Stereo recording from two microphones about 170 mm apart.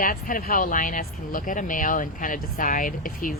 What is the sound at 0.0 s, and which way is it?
Speech, 55° left (ahead or behind).